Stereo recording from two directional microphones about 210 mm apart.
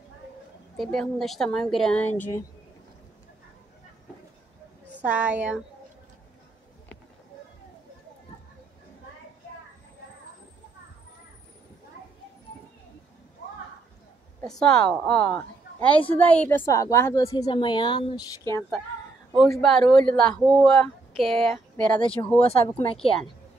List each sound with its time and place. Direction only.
0.7 s speech: centre (ahead or behind)
5.0 s a woman's voice: 5° right (ahead or behind)
14.6 s a woman's voice: 5° left (ahead or behind); by 18.3 s 20° left (ahead or behind)
18.5 s speech: 5° left (ahead or behind)
22.4 s speech: 25° left (ahead or behind)